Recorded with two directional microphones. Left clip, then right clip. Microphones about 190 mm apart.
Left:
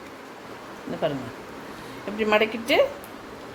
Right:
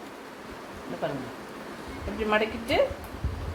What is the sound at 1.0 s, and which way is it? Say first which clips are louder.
A woman's voice: left 5 dB; 45° left (ahead or behind).